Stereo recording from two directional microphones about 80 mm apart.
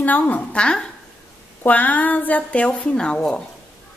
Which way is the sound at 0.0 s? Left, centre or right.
Left.